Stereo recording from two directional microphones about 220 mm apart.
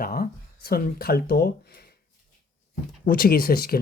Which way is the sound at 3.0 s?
40° left (ahead or behind).